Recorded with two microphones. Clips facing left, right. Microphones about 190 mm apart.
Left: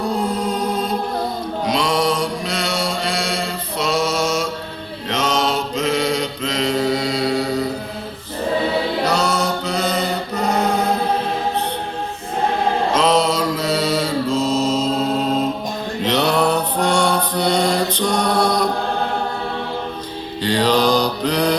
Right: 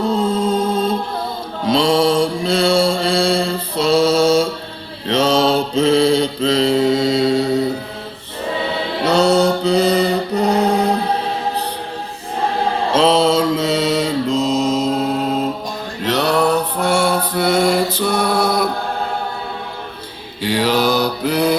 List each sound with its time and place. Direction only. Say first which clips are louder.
0.0 s music: right 4 dB; 25° right (ahead or behind)
1.6 s mantra: right 5 dB; 30° right (ahead or behind)
9.0 s mantra: right 6 dB; 30° right (ahead or behind)
12.9 s mantra: right 5 dB; 30° right (ahead or behind)
16.0 s mantra: right 2 dB; centre (ahead or behind)
20.4 s mantra: even; 10° right (ahead or behind)